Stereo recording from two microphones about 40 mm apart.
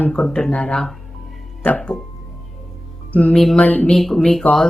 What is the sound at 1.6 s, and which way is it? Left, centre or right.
Speech, left.